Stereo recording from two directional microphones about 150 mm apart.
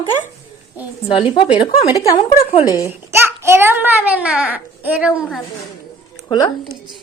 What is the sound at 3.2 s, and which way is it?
A child's voice, 15° right (ahead or behind).